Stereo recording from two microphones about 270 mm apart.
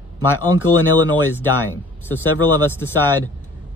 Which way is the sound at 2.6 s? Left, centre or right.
Centre.